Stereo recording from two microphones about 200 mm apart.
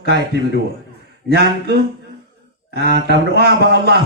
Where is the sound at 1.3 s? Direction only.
50° right (ahead or behind).